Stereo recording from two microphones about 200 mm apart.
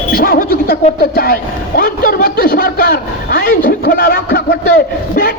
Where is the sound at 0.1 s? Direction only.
45° left (ahead or behind).